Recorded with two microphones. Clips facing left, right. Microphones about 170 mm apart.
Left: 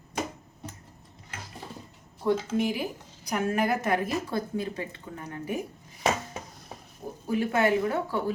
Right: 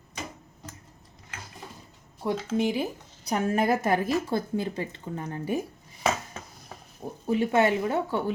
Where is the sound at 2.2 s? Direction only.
20° right (ahead or behind).